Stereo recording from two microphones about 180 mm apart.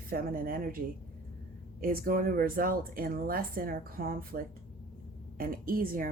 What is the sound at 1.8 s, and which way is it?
Speech, 55° right (ahead or behind).